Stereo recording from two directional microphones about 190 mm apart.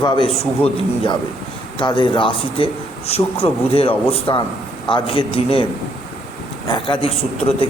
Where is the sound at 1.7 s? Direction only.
25° left (ahead or behind).